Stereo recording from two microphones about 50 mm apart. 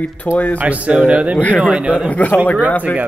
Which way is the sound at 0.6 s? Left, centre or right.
Right.